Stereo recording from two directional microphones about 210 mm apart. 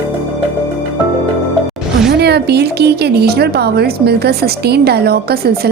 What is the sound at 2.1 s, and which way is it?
Speech, 50° right (ahead or behind).